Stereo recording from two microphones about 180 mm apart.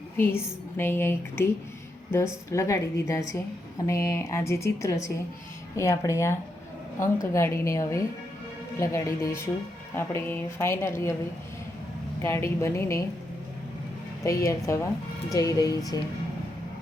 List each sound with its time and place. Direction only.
0.2 s speech: 15° left (ahead or behind)
12.2 s speech: 15° left (ahead or behind)
14.3 s speech: 15° left (ahead or behind)